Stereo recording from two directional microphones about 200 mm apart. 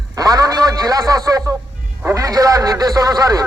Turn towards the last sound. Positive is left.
turn(degrees=-20)  # may be behind; listen again after turning